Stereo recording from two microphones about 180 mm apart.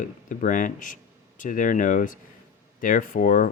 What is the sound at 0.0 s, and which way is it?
Speech, 45° left (ahead or behind).